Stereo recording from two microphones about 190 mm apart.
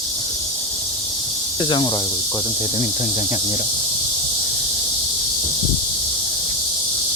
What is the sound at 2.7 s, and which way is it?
Speech, 45° left (ahead or behind).